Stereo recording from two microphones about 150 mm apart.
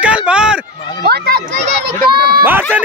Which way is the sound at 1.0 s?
90° right.